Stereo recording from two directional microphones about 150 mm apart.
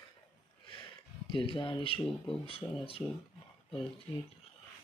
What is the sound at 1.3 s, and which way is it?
Speech, 35° left (ahead or behind).